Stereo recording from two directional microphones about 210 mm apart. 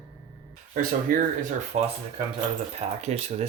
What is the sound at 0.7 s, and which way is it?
Speech, 40° right (ahead or behind).